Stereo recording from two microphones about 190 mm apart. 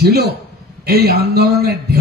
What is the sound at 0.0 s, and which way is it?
A man's voice, 55° right (ahead or behind).